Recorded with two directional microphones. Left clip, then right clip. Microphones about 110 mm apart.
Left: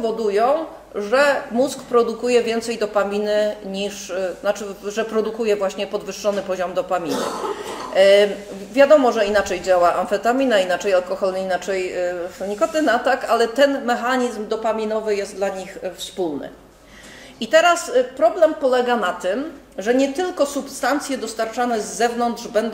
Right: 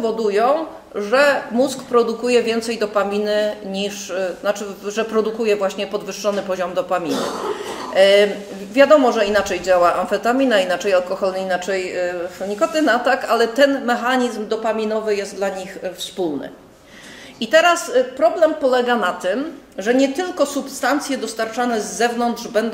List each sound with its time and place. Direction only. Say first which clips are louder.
0.0 s a woman's voice: right 1 dB; 35° left (ahead or behind)
17.4 s a woman's voice: right 1 dB; 30° left (ahead or behind)